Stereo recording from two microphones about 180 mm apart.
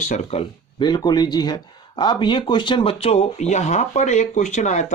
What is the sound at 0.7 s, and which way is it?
Speech, 25° left (ahead or behind).